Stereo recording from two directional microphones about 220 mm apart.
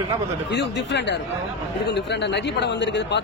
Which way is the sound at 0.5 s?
50° left (ahead or behind).